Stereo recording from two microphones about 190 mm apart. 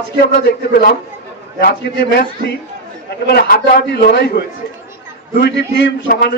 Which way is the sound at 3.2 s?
55° left (ahead or behind).